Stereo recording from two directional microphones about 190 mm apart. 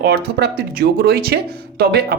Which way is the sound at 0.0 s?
55° right (ahead or behind).